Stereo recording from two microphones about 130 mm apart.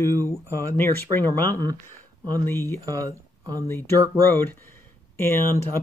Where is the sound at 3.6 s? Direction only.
20° left (ahead or behind).